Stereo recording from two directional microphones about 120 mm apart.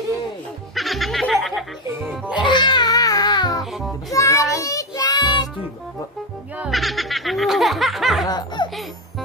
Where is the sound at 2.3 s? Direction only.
40° left (ahead or behind).